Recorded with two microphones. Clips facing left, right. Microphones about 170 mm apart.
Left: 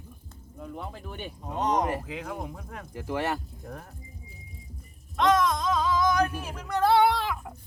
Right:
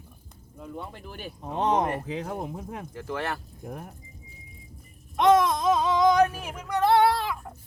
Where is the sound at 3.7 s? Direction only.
15° right (ahead or behind).